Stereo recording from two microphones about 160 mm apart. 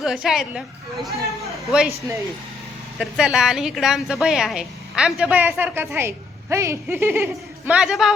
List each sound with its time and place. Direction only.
0.0 s a woman's voice: 5° right (ahead or behind)
3.0 s a woman's voice: 5° right (ahead or behind)
7.7 s a woman's voice: 5° right (ahead or behind)